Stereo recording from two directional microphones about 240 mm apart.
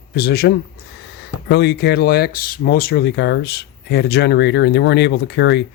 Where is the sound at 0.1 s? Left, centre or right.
Left.